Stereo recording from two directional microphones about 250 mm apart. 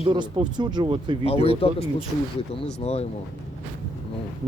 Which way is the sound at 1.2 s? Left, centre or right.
Left.